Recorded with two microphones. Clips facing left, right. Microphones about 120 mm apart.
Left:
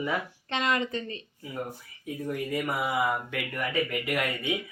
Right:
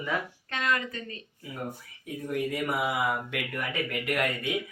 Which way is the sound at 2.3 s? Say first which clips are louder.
Right 2 dB; centre (ahead or behind).